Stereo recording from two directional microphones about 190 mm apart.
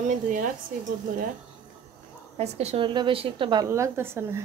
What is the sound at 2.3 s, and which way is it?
A woman's voice, 35° right (ahead or behind).